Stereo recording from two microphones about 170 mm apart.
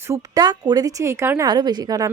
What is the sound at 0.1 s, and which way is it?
Speech, 20° right (ahead or behind).